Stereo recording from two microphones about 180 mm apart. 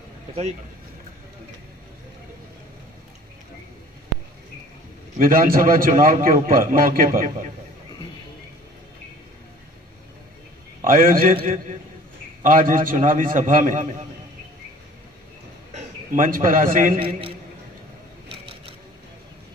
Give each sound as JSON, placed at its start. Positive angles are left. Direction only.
{"t": 5.2, "sound": "a man's voice", "side_deg": -55}
{"t": 10.8, "sound": "a man's voice", "side_deg": -50}
{"t": 11.3, "sound": "a man's voice", "side_deg": -40}
{"t": 15.7, "sound": "a man's voice", "side_deg": -50}
{"t": 17.0, "sound": "a man's voice", "side_deg": -30}